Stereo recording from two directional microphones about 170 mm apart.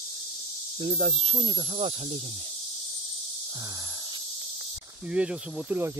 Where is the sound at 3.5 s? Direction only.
20° right (ahead or behind).